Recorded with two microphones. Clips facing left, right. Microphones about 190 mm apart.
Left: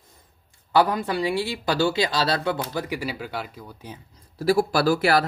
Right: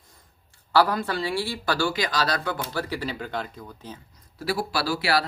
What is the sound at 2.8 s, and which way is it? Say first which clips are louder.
Speech: left 1 dB; 10° left (ahead or behind).